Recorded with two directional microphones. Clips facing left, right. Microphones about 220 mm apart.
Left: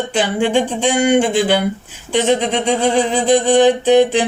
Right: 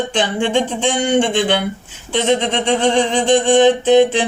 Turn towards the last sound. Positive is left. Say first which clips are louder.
# even
turn(degrees=10)  # may be behind; listen again after turning